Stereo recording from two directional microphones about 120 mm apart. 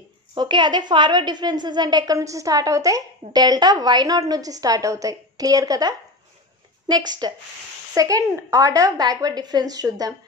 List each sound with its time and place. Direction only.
0.3 s a woman's voice: 40° right (ahead or behind)